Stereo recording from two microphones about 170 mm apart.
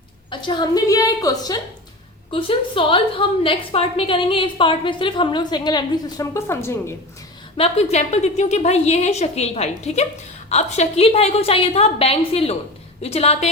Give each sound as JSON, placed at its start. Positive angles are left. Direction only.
{"t": 0.3, "sound": "a woman's voice", "side_deg": 25}
{"t": 7.5, "sound": "a woman's voice", "side_deg": 35}